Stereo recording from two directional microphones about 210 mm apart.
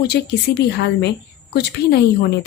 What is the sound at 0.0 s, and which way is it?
Speech, 50° left (ahead or behind).